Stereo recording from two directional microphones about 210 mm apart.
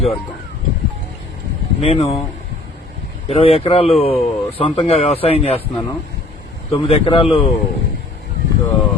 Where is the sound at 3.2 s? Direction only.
30° left (ahead or behind).